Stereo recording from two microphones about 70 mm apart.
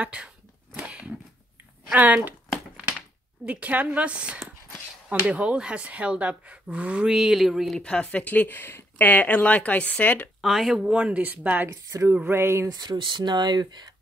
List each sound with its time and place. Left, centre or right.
0.0 s speech: centre
0.8 s a sound: centre
1.9 s a woman's voice: centre
3.4 s a woman's voice: centre
7.1 s speech: centre
7.7 s speech: centre
10.4 s speech: centre
10.9 s a woman's voice: centre
11.7 s speech: right
12.6 s speech: right